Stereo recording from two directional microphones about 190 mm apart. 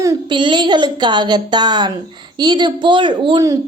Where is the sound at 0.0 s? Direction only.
20° right (ahead or behind).